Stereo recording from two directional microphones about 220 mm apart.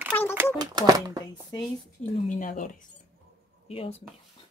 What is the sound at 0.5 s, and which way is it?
Speech, 20° right (ahead or behind).